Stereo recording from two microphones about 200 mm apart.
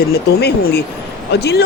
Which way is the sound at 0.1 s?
50° left (ahead or behind).